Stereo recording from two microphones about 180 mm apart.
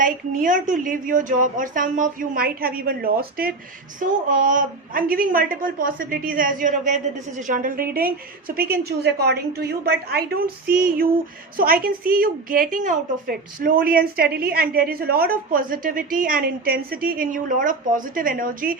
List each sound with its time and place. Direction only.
0.0 s a woman's voice: 45° right (ahead or behind)
11.5 s a woman's voice: 55° right (ahead or behind)